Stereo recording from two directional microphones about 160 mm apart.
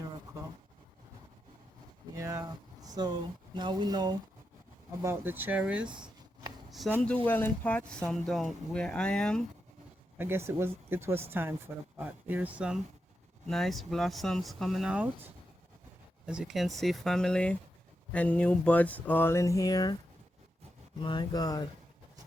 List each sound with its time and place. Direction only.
2.1 s speech: 20° right (ahead or behind)
4.9 s speech: 15° right (ahead or behind)
5.8 s a sound: 30° right (ahead or behind)
6.7 s a sound: centre (ahead or behind)
7.3 s speech: 10° left (ahead or behind)
10.2 s speech: 15° right (ahead or behind); by 20.0 s 25° left (ahead or behind)
21.0 s speech: 30° left (ahead or behind)